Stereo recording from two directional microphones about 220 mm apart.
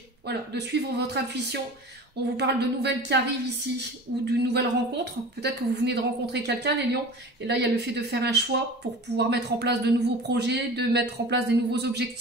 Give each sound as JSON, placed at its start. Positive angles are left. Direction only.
{"t": 0.3, "sound": "a woman's voice", "side_deg": -50}